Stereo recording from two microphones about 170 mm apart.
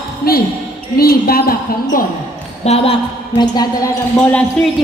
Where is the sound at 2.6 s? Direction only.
35° left (ahead or behind).